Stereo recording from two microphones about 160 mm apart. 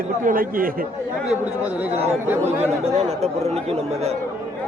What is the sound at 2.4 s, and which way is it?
Speech, 40° right (ahead or behind).